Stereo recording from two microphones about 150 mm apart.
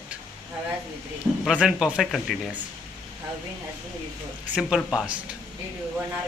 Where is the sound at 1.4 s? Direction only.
Centre (ahead or behind).